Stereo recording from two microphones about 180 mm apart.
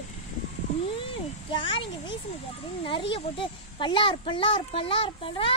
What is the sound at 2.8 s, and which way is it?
Speech, 30° left (ahead or behind).